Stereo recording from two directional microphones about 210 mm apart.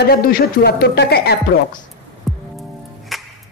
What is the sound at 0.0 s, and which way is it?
Speech, 50° left (ahead or behind).